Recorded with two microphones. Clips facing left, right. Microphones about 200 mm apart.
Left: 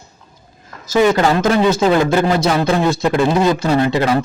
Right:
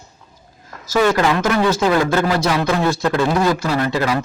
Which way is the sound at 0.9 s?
20° left (ahead or behind).